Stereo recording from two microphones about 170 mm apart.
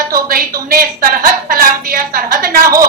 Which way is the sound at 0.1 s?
55° right (ahead or behind).